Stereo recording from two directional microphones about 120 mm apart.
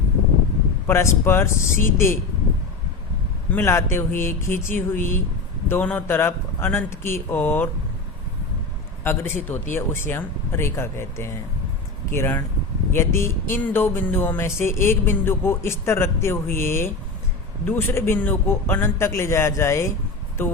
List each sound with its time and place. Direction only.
0.9 s speech: 20° left (ahead or behind)
3.5 s speech: 20° left (ahead or behind)
9.0 s speech: 20° left (ahead or behind)